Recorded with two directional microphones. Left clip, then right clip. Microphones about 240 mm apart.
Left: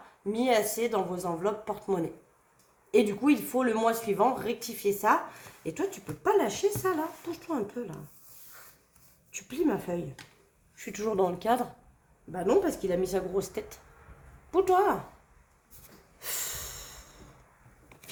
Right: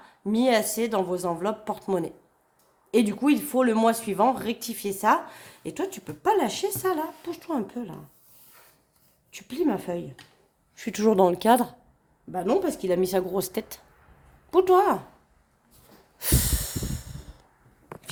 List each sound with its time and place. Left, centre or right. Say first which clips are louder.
0.3 s a woman's voice: right 3 dB; right
9.3 s a woman's voice: right 3 dB; right
16.1 s snort: right 8 dB; right